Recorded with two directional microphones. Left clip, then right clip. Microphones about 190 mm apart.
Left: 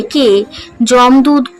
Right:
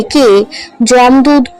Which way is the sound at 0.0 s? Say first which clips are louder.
Right 3 dB; 15° right (ahead or behind).